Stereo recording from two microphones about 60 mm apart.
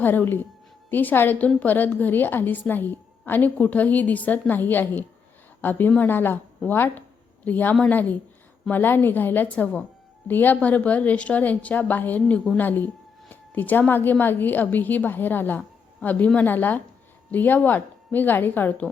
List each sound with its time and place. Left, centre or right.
0.0 s a woman's voice: left